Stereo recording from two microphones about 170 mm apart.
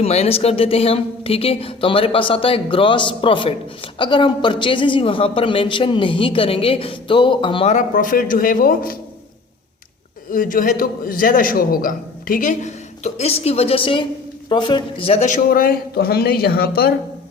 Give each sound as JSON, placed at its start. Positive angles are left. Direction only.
{"t": 0.0, "sound": "a woman's voice", "side_deg": 35}
{"t": 7.7, "sound": "a man's voice", "side_deg": 50}
{"t": 10.3, "sound": "a man's voice", "side_deg": 55}
{"t": 15.4, "sound": "speech", "side_deg": 60}